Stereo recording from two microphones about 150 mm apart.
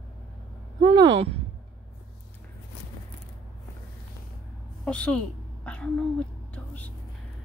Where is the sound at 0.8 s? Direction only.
35° right (ahead or behind).